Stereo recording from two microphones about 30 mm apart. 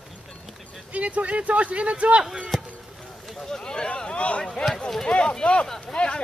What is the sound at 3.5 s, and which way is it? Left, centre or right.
Speech, left.